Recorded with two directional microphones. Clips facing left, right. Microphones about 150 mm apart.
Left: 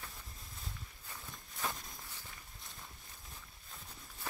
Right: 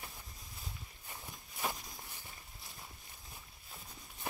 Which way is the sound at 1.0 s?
20° right (ahead or behind).